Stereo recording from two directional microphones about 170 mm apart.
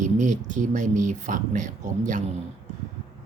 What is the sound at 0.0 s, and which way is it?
Speech, 45° right (ahead or behind).